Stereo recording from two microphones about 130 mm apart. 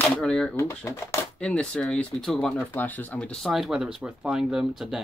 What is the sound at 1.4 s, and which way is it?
Speech, 5° left (ahead or behind).